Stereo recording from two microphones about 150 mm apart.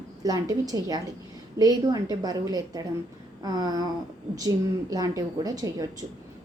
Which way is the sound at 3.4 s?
25° right (ahead or behind).